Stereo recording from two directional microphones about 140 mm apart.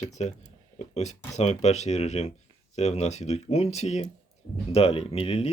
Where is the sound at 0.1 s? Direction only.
55° left (ahead or behind).